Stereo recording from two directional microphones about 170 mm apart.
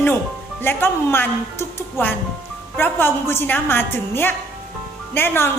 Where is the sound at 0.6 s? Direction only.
15° left (ahead or behind).